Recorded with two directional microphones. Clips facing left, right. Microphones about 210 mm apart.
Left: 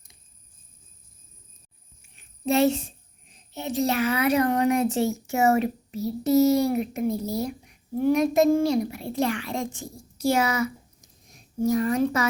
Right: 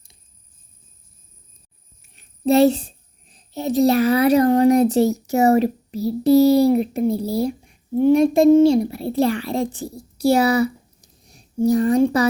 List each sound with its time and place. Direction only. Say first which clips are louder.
2.1 s a child's voice: right 7 dB; 35° right (ahead or behind)